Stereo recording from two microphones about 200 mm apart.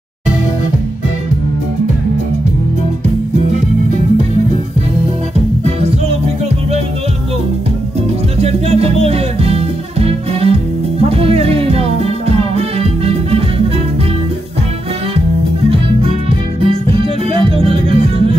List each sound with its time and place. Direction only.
8.4 s music: 30° right (ahead or behind)
16.6 s music: 30° right (ahead or behind)